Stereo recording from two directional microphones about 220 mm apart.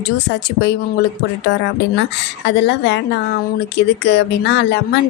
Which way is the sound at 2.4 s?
50° left (ahead or behind).